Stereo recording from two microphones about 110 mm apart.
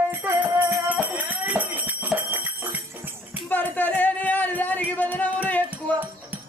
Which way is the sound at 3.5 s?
15° left (ahead or behind).